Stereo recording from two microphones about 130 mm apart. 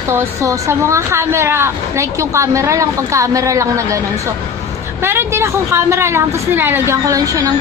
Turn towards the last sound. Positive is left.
turn(degrees=-25)  # may be behind; listen again after turning